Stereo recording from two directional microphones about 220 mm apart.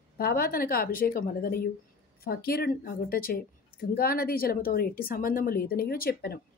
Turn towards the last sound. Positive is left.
turn(degrees=45)  # may be behind; listen again after turning